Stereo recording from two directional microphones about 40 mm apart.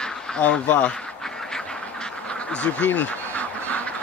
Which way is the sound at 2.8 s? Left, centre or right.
Left.